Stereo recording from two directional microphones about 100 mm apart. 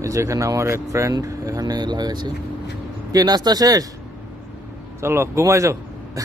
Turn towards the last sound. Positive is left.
turn(degrees=-30)  # may be behind; listen again after turning